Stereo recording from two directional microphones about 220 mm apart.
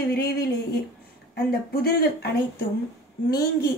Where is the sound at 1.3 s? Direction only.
45° left (ahead or behind).